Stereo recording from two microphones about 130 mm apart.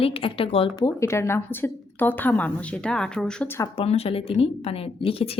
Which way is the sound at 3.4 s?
20° left (ahead or behind).